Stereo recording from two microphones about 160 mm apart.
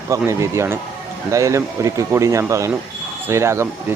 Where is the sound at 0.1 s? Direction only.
20° right (ahead or behind).